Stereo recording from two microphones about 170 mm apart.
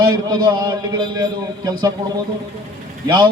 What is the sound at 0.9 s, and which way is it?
Speech, 25° right (ahead or behind).